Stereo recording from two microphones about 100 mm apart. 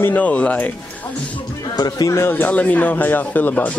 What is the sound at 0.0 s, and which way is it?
Speech, 15° left (ahead or behind).